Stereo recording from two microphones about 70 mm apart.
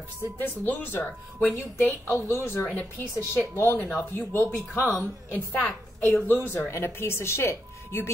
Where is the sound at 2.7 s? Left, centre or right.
Left.